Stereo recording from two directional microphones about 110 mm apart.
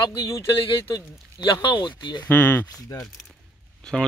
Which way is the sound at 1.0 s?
45° left (ahead or behind).